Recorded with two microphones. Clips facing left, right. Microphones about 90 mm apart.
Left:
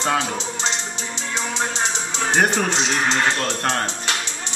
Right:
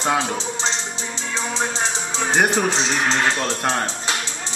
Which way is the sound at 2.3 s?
5° right (ahead or behind).